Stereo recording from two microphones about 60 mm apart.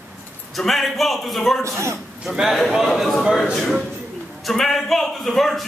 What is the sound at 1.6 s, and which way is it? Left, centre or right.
Speech, right.